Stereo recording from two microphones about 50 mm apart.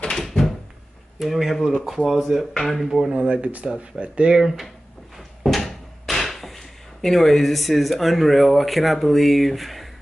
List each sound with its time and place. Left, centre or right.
0.2 s door: centre
1.2 s speech: centre
2.9 s speech: centre
3.2 s speech: right
4.4 s speech: centre
5.4 s speech: centre